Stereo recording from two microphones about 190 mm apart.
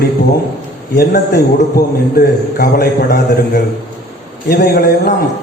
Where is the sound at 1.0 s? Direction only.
50° left (ahead or behind).